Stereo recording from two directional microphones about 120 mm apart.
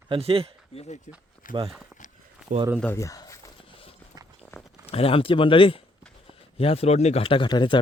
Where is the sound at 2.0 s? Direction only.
90° left.